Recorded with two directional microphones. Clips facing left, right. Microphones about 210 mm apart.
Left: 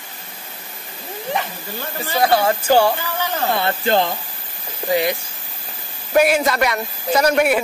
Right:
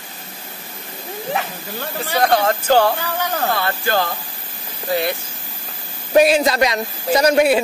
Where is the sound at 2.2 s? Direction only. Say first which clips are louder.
Even; 10° left (ahead or behind).